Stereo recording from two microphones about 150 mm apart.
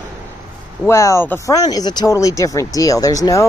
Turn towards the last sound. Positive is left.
turn(degrees=25)  # may be behind; listen again after turning